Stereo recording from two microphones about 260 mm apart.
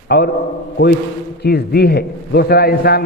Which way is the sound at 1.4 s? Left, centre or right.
Left.